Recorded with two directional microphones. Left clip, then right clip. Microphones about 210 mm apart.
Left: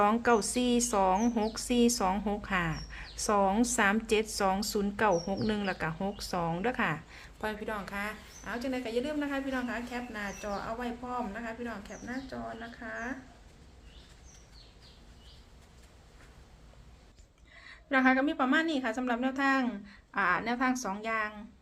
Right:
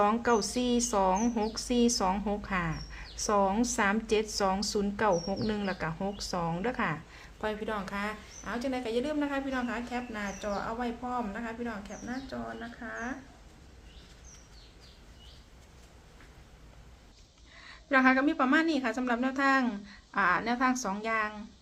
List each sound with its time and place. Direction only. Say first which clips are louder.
0.0 s a woman's voice: even; 5° left (ahead or behind)
17.6 s a woman's voice: right 2 dB; 10° right (ahead or behind)